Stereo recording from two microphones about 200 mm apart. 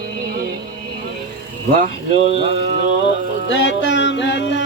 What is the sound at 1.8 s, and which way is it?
Speech, 35° right (ahead or behind).